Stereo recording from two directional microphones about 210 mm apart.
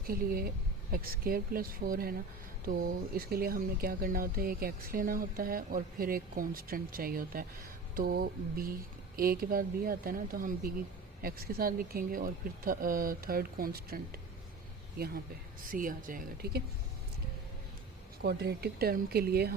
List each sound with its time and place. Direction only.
0.1 s speech: 45° right (ahead or behind)
18.2 s speech: 50° right (ahead or behind)